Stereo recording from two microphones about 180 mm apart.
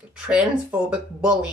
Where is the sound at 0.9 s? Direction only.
5° right (ahead or behind).